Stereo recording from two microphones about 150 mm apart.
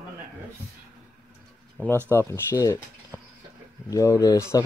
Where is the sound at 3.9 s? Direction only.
25° left (ahead or behind).